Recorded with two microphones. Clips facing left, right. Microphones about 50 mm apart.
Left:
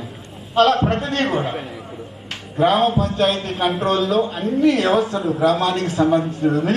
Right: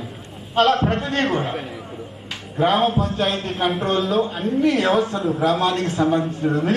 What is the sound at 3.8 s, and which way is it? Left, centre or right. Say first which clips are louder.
Speech: left 4 dB; left.